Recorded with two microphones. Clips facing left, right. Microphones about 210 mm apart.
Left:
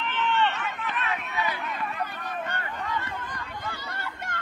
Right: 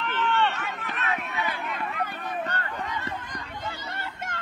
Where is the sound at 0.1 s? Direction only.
Centre (ahead or behind).